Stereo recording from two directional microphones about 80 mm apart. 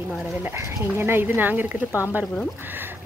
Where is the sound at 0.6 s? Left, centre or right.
Right.